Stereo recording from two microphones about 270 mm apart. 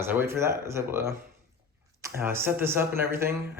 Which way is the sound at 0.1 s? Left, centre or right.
Centre.